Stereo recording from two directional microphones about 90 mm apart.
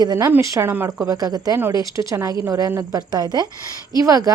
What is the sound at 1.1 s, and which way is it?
Speech, 45° right (ahead or behind).